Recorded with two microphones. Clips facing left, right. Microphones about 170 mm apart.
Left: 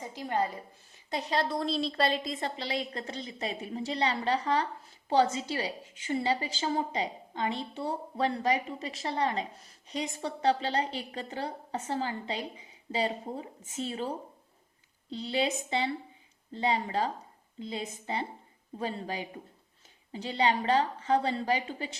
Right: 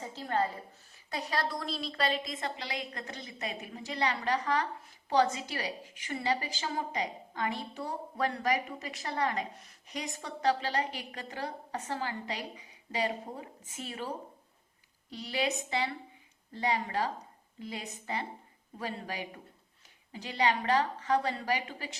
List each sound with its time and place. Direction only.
0.0 s a sound: 15° left (ahead or behind)
1.1 s a woman's voice: 25° left (ahead or behind)
15.1 s a woman's voice: 25° left (ahead or behind)